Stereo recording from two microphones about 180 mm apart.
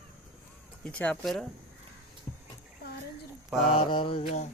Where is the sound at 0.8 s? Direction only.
5° left (ahead or behind).